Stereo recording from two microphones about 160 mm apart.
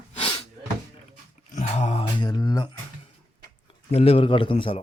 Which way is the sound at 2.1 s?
25° left (ahead or behind).